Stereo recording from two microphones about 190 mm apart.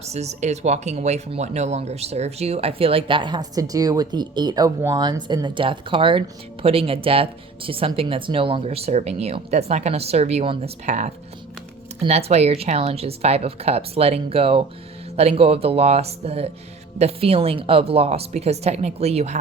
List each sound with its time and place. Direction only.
0.0 s speech: 35° right (ahead or behind)